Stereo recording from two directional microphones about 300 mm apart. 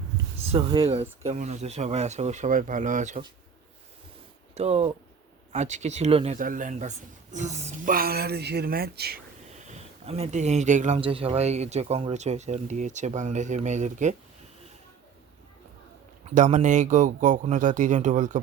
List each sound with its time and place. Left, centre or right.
0.5 s speech: centre
4.5 s speech: right
16.2 s speech: right